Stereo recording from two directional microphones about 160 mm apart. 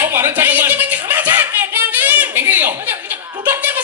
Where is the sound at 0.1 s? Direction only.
15° right (ahead or behind).